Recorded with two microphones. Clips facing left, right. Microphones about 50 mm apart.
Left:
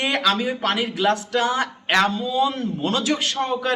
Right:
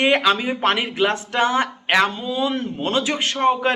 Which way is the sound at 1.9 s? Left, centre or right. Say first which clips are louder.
Even; centre.